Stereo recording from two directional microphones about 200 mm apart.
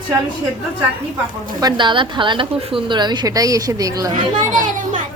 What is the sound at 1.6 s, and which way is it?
A woman's voice, 20° right (ahead or behind).